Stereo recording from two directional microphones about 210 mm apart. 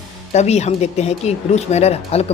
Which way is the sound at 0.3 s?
30° left (ahead or behind).